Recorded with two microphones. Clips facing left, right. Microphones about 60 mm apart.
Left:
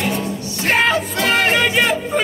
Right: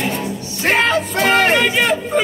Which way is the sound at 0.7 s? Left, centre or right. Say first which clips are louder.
Even; centre.